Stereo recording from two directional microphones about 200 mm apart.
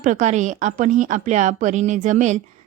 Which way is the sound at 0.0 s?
40° right (ahead or behind).